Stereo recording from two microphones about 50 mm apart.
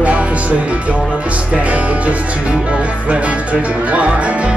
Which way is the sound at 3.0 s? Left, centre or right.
Right.